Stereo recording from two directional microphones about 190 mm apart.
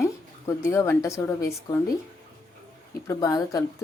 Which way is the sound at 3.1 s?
15° left (ahead or behind).